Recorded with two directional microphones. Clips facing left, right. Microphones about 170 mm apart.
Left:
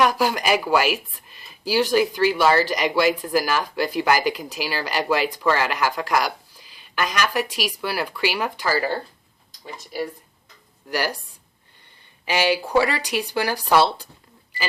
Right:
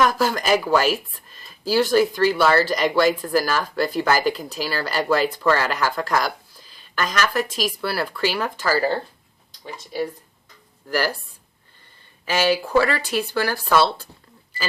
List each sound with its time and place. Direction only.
0.0 s speech: 15° left (ahead or behind)
10.8 s speech: 20° left (ahead or behind)
12.2 s speech: 15° left (ahead or behind)